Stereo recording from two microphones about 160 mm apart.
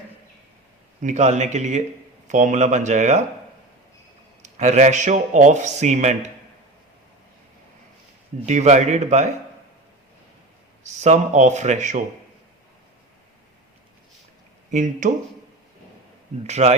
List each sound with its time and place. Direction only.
1.0 s speech: 45° right (ahead or behind)
4.4 s speech: 45° right (ahead or behind)
8.4 s speech: 50° right (ahead or behind)
11.0 s speech: 45° right (ahead or behind)
14.7 s speech: 50° right (ahead or behind)
16.5 s speech: 45° right (ahead or behind)